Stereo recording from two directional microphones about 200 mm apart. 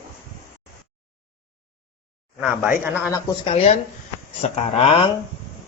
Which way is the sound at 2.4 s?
5° right (ahead or behind).